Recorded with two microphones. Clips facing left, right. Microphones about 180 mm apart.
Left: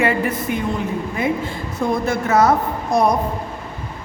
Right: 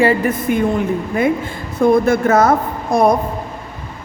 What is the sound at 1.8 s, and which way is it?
A woman's voice, 55° right (ahead or behind).